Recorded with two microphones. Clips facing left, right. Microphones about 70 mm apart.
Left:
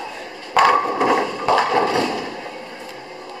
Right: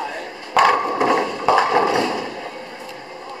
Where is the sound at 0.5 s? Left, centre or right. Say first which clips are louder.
Left 1 dB; centre.